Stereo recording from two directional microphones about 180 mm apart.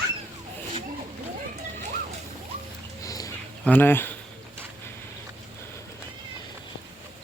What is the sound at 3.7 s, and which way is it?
Speech, 10° left (ahead or behind).